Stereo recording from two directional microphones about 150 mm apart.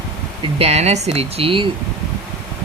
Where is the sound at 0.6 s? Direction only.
45° right (ahead or behind).